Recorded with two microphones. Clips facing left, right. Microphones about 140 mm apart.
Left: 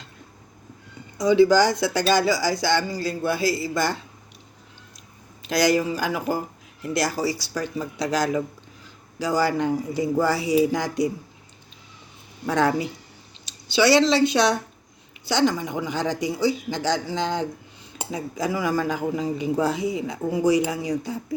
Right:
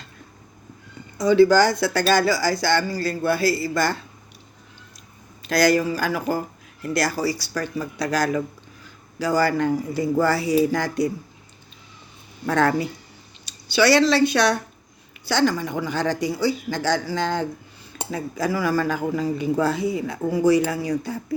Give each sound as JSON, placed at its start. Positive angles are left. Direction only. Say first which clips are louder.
{"t": 1.2, "sound": "speech", "louder": "right 1 dB", "side_deg": 15}
{"t": 5.4, "sound": "speech", "louder": "right 2 dB", "side_deg": 20}
{"t": 12.5, "sound": "speech", "louder": "right 1 dB", "side_deg": 15}